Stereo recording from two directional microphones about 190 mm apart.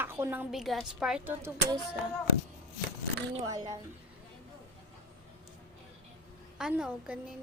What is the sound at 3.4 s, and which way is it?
Speech, 20° right (ahead or behind).